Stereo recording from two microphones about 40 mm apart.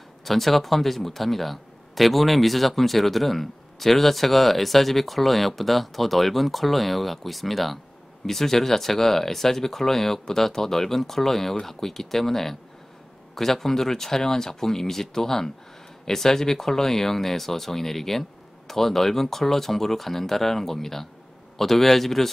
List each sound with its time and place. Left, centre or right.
0.2 s speech: centre